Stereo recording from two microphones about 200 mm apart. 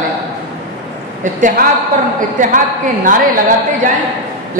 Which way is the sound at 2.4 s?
40° right (ahead or behind).